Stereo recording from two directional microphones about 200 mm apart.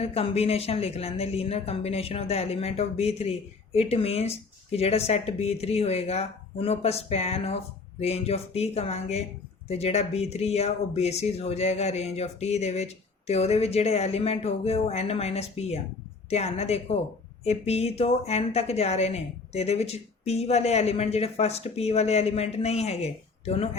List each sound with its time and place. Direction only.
0.0 s speech: 30° left (ahead or behind)